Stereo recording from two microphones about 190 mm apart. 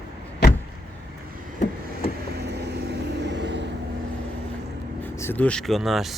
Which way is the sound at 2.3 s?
60° right (ahead or behind).